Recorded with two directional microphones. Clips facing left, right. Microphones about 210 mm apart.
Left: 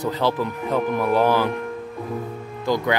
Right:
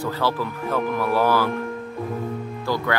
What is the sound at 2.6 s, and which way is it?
Speech, 20° left (ahead or behind).